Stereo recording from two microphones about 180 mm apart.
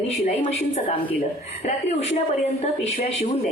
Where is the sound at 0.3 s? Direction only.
35° left (ahead or behind).